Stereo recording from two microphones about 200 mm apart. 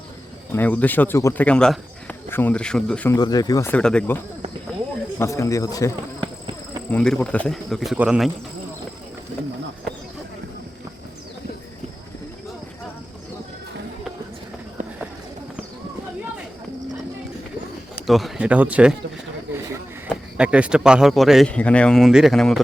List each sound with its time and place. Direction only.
0.5 s speech: 10° left (ahead or behind)
3.2 s speech: 20° left (ahead or behind)
5.2 s speech: 15° left (ahead or behind); by 8.3 s 5° right (ahead or behind)
17.9 s speech: centre (ahead or behind)
20.1 s speech: 5° right (ahead or behind)